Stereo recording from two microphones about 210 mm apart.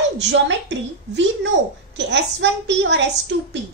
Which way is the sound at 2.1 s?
60° right (ahead or behind).